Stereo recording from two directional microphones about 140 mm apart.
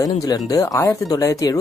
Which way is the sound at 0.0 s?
25° left (ahead or behind).